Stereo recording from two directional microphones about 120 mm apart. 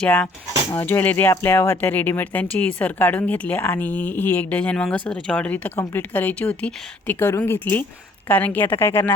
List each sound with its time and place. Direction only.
0.0 s speech: 15° left (ahead or behind)